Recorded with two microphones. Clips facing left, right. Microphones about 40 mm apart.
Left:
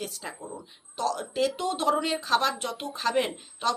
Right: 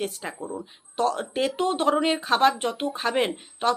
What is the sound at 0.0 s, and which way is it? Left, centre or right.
Speech, right.